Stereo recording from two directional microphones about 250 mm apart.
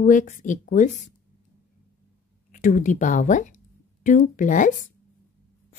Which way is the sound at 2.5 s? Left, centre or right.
Left.